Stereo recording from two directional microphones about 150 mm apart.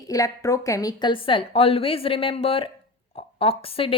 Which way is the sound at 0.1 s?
20° left (ahead or behind).